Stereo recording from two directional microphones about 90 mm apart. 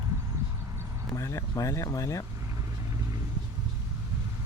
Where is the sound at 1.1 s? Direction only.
40° left (ahead or behind).